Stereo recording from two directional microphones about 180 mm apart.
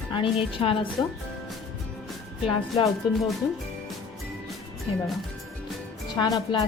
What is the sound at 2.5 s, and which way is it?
Speech, 20° left (ahead or behind).